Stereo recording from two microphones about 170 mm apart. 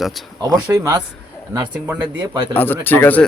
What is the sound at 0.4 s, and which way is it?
Speech, 20° right (ahead or behind).